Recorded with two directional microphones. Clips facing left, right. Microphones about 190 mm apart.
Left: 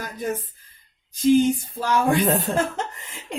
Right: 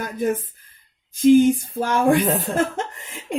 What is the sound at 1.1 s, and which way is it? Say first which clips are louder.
Speech: right 4 dB; 55° right (ahead or behind).